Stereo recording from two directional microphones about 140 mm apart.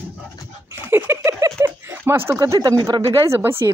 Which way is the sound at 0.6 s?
15° right (ahead or behind).